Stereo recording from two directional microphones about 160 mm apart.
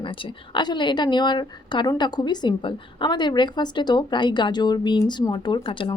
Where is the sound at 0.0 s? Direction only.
30° left (ahead or behind).